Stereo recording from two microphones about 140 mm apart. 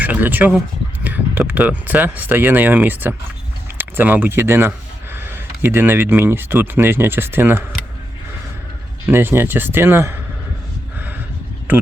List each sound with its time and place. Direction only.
0.0 s speech: 10° right (ahead or behind)
9.0 s speech: 15° right (ahead or behind)